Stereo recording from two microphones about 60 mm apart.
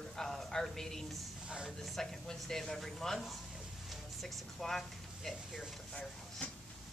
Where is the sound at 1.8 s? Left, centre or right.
Centre.